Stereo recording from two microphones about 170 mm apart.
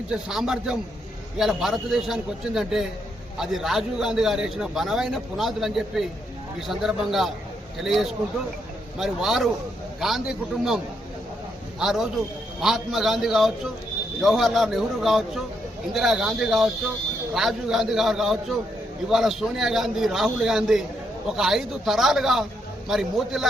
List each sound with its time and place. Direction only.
0.1 s a man's voice: 5° right (ahead or behind)
11.8 s a man's voice: centre (ahead or behind)